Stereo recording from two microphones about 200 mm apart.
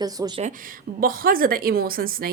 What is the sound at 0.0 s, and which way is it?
Speech, 20° right (ahead or behind).